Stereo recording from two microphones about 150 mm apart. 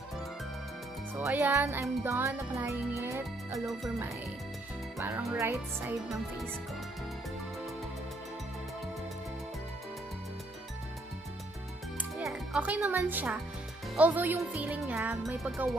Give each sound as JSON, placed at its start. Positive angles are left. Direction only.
{"t": 1.2, "sound": "music", "side_deg": -15}
{"t": 3.5, "sound": "speech", "side_deg": 0}
{"t": 4.9, "sound": "music", "side_deg": -15}
{"t": 12.0, "sound": "music", "side_deg": -5}
{"t": 15.3, "sound": "speech", "side_deg": 0}